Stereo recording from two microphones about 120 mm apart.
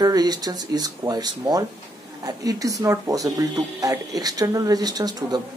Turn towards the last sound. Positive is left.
turn(degrees=-35)  # may be behind; listen again after turning